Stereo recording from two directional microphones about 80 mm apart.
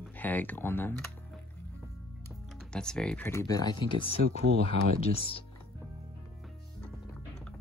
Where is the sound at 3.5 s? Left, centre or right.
Left.